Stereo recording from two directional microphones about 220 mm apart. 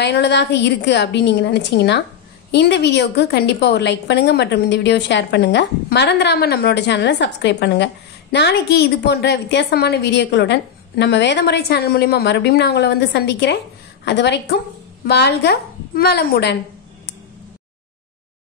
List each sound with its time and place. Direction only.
0.0 s a woman's voice: 50° left (ahead or behind)